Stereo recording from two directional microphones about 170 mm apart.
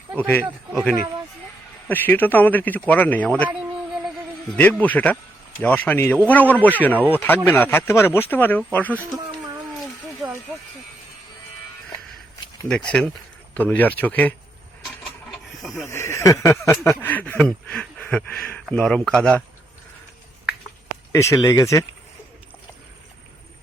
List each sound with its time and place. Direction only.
0.2 s speech: 10° left (ahead or behind)
0.7 s speech: centre (ahead or behind)
1.9 s speech: 10° left (ahead or behind)
4.5 s speech: 10° left (ahead or behind)
9.0 s speech: 20° right (ahead or behind)
12.6 s speech: 5° left (ahead or behind)
14.8 s a sound: centre (ahead or behind)
15.9 s speech: 15° left (ahead or behind)
21.1 s speech: 20° left (ahead or behind)